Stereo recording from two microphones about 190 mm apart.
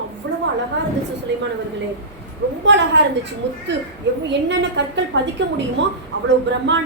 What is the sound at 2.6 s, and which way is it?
Speech, 65° right (ahead or behind).